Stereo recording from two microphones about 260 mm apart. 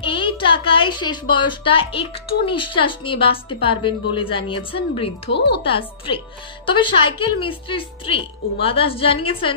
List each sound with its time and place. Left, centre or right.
0.0 s a woman's voice: centre
5.3 s speech: left
5.6 s a woman's voice: centre